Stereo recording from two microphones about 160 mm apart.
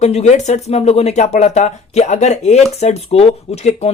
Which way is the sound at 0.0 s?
45° left (ahead or behind).